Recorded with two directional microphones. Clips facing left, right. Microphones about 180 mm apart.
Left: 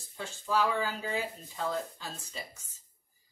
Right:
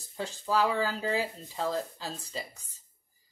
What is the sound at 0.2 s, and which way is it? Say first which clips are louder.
Speech: right 2 dB; 35° right (ahead or behind).